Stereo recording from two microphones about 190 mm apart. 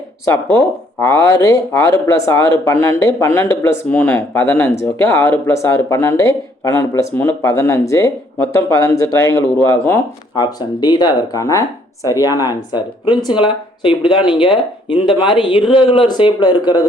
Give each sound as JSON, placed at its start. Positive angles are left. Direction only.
{"t": 0.3, "sound": "speech", "side_deg": 10}
{"t": 10.4, "sound": "speech", "side_deg": 20}